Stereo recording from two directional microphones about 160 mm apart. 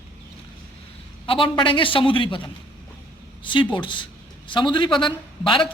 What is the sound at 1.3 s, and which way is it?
Speech, 35° left (ahead or behind).